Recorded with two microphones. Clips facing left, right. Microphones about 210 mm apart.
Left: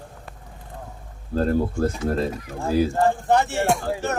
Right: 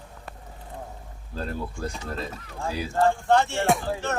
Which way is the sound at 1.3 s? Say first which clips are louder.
Left 11 dB; 50° left (ahead or behind).